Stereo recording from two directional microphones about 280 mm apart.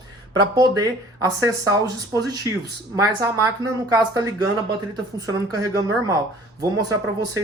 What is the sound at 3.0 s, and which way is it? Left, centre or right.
Speech, centre.